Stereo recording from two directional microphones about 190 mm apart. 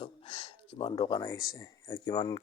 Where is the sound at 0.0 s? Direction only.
30° left (ahead or behind).